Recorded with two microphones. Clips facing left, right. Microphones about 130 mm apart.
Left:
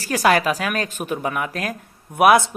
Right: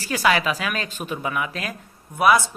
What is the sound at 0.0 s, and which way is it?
A man's voice, 45° left (ahead or behind).